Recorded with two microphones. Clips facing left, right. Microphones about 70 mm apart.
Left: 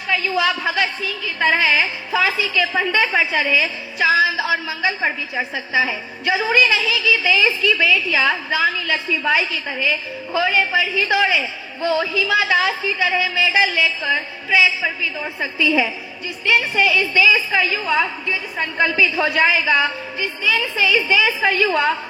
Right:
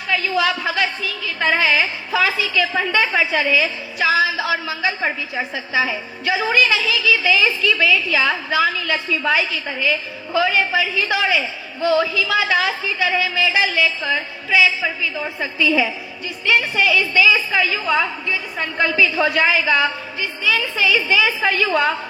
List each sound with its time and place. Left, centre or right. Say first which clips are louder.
0.1 s a woman's voice: even; left
6.2 s a woman's voice: left 1 dB; left